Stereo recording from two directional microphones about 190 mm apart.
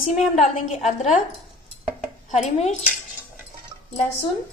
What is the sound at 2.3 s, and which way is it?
Speech, 35° left (ahead or behind).